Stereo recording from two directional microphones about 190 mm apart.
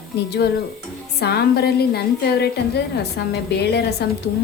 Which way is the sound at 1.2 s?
55° left (ahead or behind).